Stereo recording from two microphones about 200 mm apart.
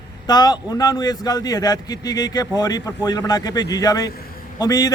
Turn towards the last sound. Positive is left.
turn(degrees=20)  # may be behind; listen again after turning